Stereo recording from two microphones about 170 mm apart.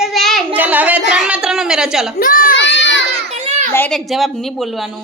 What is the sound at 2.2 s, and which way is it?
Speech, 55° left (ahead or behind).